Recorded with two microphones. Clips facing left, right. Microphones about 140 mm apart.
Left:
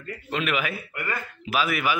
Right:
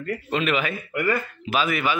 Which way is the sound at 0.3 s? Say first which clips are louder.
Right 2 dB; centre (ahead or behind).